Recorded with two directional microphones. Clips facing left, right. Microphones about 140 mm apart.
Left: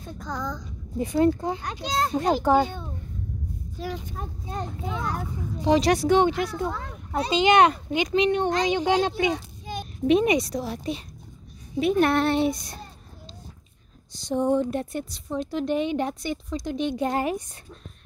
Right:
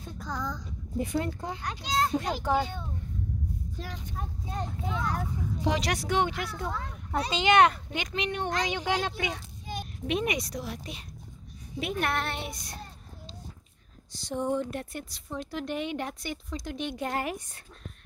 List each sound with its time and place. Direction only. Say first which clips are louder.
0.2 s speech: left 3 dB; 5° right (ahead or behind)
1.0 s speech: left 11 dB; 30° left (ahead or behind)
2.4 s speech: left 8 dB; 40° left (ahead or behind)
3.8 s speech: left 9 dB; 5° left (ahead or behind)
5.7 s speech: left 10 dB; 30° left (ahead or behind)
14.1 s speech: left 7 dB; 20° left (ahead or behind)